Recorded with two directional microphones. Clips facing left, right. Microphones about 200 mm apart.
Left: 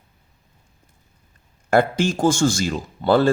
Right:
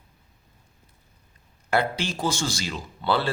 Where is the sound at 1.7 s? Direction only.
50° left (ahead or behind).